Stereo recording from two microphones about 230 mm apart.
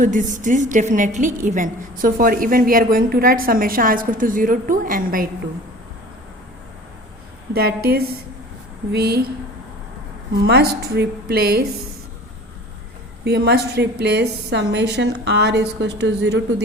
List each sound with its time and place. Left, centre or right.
0.0 s a woman's voice: right
7.5 s a woman's voice: right
10.4 s a woman's voice: right
13.2 s a woman's voice: right